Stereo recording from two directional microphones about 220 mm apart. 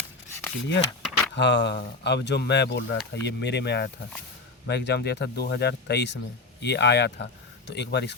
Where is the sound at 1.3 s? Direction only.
50° left (ahead or behind).